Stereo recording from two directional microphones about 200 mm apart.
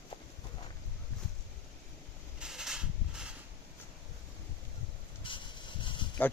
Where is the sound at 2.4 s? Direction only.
Centre (ahead or behind).